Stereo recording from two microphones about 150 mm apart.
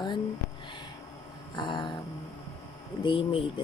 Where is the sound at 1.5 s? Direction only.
30° left (ahead or behind).